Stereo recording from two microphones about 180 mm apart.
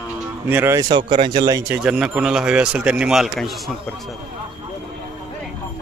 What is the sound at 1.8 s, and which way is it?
Speech, 5° right (ahead or behind).